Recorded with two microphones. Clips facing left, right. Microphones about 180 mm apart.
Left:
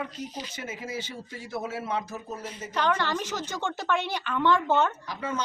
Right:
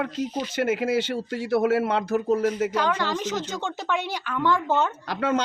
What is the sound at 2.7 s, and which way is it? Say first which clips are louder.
A woman's voice: right 2 dB; 10° right (ahead or behind).